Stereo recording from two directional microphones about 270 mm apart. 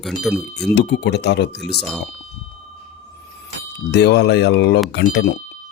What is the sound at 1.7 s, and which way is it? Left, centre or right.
Speech, centre.